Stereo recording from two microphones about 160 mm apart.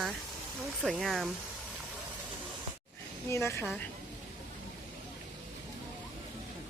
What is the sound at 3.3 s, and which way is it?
Speech, 15° left (ahead or behind).